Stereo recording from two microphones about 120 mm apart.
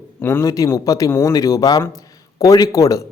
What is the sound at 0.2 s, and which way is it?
A man's voice, 20° left (ahead or behind).